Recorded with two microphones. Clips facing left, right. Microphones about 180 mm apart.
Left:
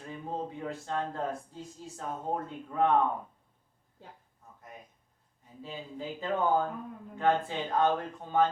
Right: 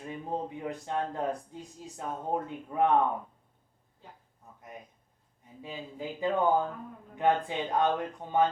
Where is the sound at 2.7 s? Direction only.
15° right (ahead or behind).